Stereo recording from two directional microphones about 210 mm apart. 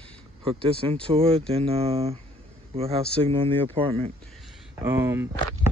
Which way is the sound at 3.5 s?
10° left (ahead or behind).